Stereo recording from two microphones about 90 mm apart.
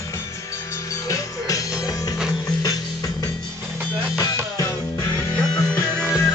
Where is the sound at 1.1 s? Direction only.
40° left (ahead or behind).